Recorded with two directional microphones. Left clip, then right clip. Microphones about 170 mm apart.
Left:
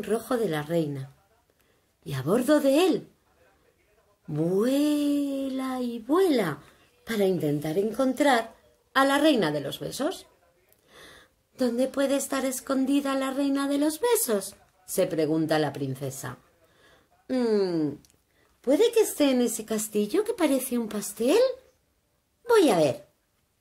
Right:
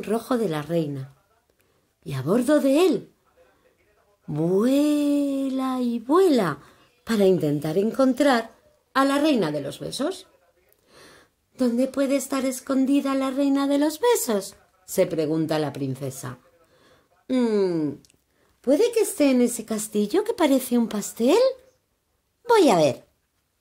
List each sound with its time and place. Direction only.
0.0 s speech: 30° right (ahead or behind)
2.0 s speech: 30° right (ahead or behind)
4.3 s speech: 30° right (ahead or behind)
11.1 s a woman's voice: 25° right (ahead or behind)
16.8 s a sound: 30° right (ahead or behind)
18.8 s speech: 30° right (ahead or behind)